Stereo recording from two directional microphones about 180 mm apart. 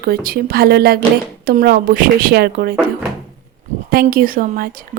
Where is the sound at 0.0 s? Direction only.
55° right (ahead or behind).